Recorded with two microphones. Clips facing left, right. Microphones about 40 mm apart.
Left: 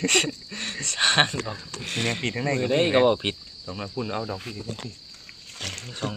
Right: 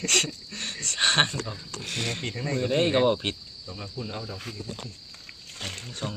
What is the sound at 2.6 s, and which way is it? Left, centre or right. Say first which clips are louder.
Speech: left 2 dB; centre.